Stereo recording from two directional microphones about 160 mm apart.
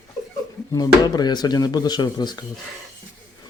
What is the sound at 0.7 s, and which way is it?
Speech, 25° left (ahead or behind).